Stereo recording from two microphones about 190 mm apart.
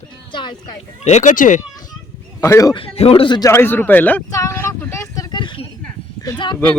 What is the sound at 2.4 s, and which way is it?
Speech, 15° left (ahead or behind).